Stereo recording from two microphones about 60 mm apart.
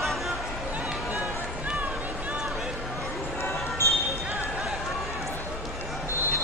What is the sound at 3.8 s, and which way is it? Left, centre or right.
Basketball bounce, left.